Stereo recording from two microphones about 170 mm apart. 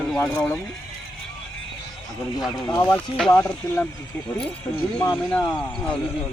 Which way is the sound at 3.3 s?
10° left (ahead or behind).